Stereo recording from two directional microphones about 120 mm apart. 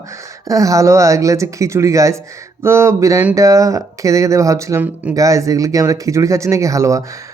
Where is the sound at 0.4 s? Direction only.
30° right (ahead or behind).